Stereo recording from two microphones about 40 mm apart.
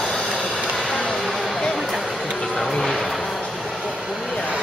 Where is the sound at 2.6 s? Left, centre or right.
Centre.